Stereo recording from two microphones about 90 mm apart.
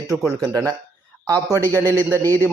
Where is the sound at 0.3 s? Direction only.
35° right (ahead or behind).